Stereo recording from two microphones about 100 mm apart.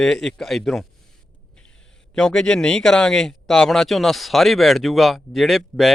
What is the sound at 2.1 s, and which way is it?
Speech, 10° left (ahead or behind).